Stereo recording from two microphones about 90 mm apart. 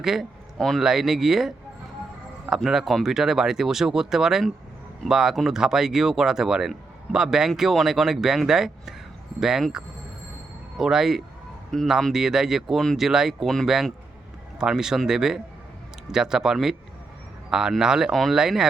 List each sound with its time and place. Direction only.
0.0 s speech: 5° right (ahead or behind)